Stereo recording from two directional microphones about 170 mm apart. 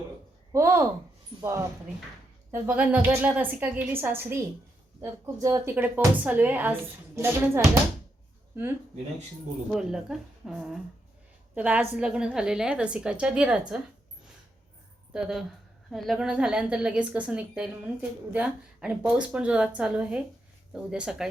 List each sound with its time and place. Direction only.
0.5 s a woman's voice: 15° right (ahead or behind)
2.5 s a woman's voice: 10° right (ahead or behind)
9.7 s a woman's voice: centre (ahead or behind)
15.1 s a woman's voice: centre (ahead or behind)